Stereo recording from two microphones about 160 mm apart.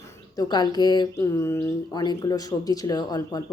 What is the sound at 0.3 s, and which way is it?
Speech, 25° left (ahead or behind).